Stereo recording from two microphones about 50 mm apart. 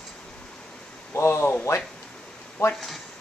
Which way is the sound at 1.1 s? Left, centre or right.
Left.